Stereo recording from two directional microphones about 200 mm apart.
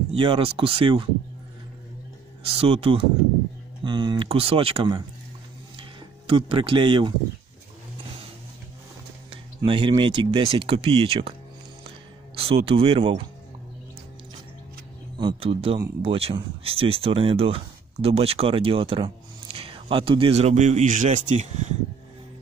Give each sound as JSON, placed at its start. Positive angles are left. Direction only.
{"t": 0.1, "sound": "speech", "side_deg": -25}
{"t": 2.4, "sound": "speech", "side_deg": -30}
{"t": 5.8, "sound": "a sound", "side_deg": -25}
{"t": 9.6, "sound": "speech", "side_deg": -25}
{"t": 12.4, "sound": "speech", "side_deg": -30}
{"t": 15.1, "sound": "speech", "side_deg": -25}